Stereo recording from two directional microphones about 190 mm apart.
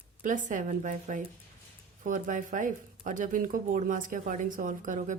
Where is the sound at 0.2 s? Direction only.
45° right (ahead or behind).